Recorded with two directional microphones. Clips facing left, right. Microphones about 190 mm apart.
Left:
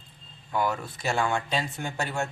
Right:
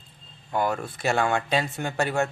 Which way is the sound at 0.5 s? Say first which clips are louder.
Right 2 dB; 50° right (ahead or behind).